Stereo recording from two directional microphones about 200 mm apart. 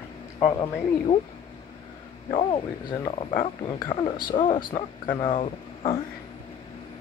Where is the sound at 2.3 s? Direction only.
30° left (ahead or behind).